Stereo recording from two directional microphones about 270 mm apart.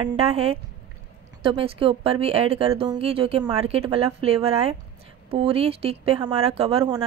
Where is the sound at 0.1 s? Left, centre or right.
Right.